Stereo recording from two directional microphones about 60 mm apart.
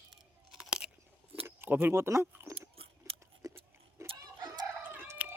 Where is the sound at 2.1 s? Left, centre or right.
Right.